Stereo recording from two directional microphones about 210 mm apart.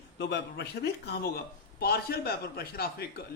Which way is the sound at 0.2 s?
55° left (ahead or behind).